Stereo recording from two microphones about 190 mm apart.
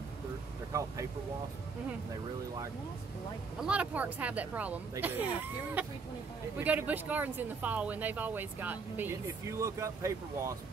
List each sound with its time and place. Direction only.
0.7 s speech: 15° right (ahead or behind)
3.6 s speech: 5° right (ahead or behind)